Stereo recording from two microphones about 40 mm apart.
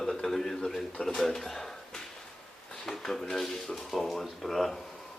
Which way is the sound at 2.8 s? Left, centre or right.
Centre.